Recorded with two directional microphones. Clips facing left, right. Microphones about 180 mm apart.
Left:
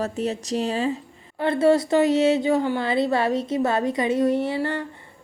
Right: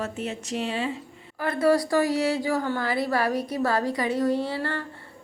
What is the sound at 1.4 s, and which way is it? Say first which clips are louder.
A woman's voice: left 3 dB; 25° left (ahead or behind).